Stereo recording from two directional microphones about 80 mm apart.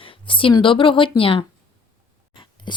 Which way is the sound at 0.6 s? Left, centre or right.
Left.